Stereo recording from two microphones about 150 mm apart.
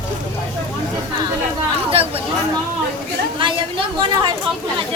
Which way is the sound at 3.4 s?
35° right (ahead or behind).